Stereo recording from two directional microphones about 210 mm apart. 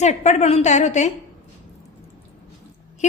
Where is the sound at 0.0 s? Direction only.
35° left (ahead or behind).